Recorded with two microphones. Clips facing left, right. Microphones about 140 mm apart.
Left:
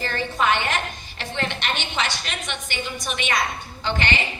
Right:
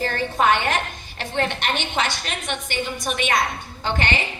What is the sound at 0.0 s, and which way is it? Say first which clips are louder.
A woman's voice: right 3 dB; 45° right (ahead or behind).